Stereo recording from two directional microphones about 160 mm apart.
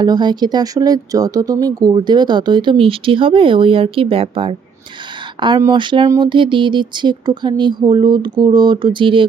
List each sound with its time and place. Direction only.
0.0 s speech: 25° right (ahead or behind)